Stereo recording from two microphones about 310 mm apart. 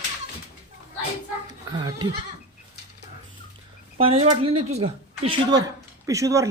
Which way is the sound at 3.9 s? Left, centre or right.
Centre.